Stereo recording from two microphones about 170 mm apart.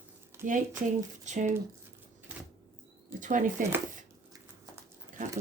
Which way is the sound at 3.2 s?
50° right (ahead or behind).